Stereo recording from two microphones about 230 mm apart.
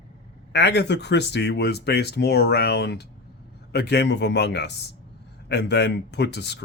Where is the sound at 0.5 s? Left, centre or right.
Left.